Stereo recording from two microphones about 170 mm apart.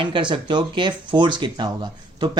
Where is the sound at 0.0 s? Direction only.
30° right (ahead or behind).